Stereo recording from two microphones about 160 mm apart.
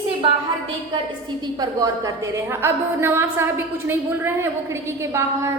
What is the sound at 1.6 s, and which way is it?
A woman's voice, 25° right (ahead or behind).